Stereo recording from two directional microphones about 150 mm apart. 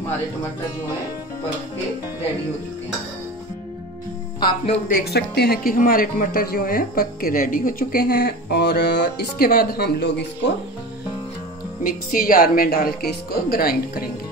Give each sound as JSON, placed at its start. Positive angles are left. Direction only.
{"t": 4.4, "sound": "speech", "side_deg": 30}
{"t": 4.8, "sound": "speech", "side_deg": 85}
{"t": 11.8, "sound": "a woman's voice", "side_deg": 65}